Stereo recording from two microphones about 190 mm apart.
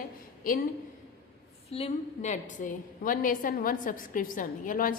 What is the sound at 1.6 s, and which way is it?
A woman's voice, 30° left (ahead or behind).